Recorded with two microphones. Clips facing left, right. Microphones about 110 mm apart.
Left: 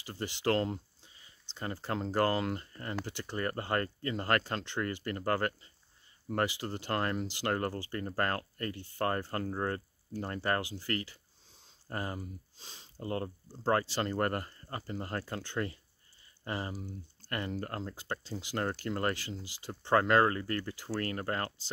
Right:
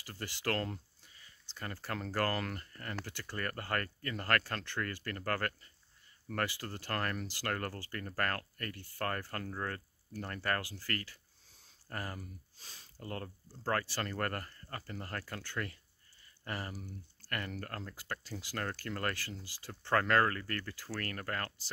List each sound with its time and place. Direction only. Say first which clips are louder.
0.0 s speech: left 6 dB; 20° left (ahead or behind)